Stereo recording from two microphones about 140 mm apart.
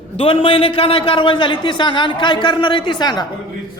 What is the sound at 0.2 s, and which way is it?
A man's voice, 40° left (ahead or behind).